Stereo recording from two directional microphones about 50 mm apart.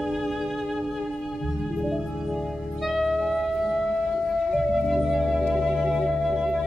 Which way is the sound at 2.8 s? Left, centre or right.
Centre.